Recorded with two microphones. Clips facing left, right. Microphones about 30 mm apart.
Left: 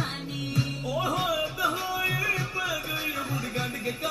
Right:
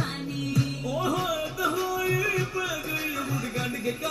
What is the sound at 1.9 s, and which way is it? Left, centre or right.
Music, left.